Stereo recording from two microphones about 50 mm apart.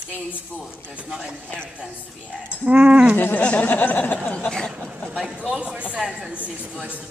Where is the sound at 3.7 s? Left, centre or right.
Left.